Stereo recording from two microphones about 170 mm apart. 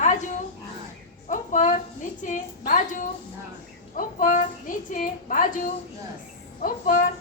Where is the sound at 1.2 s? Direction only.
45° left (ahead or behind).